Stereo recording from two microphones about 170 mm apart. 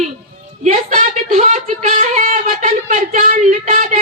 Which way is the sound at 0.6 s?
50° right (ahead or behind).